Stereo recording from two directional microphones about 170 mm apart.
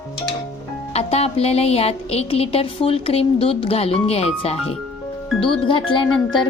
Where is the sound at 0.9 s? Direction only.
35° left (ahead or behind).